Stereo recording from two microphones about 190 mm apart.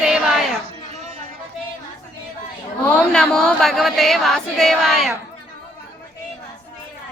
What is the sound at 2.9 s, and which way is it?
Speech, 5° left (ahead or behind).